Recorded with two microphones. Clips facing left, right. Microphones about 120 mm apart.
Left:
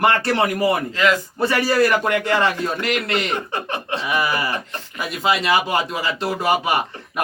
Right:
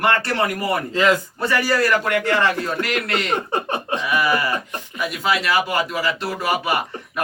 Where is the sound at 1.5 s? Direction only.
25° left (ahead or behind).